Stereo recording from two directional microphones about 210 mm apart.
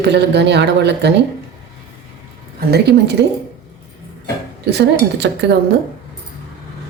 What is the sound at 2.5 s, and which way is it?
Speech, 50° right (ahead or behind).